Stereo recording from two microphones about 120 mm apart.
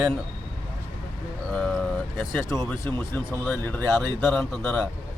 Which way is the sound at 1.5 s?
10° left (ahead or behind).